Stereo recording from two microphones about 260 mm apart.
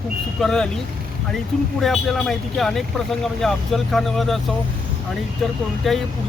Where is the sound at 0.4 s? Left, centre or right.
Centre.